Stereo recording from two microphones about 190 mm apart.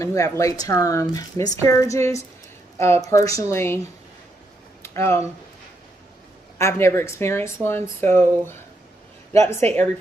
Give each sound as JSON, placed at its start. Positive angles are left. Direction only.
{"t": 0.0, "sound": "speech", "side_deg": 15}
{"t": 4.8, "sound": "speech", "side_deg": 15}
{"t": 6.6, "sound": "speech", "side_deg": 15}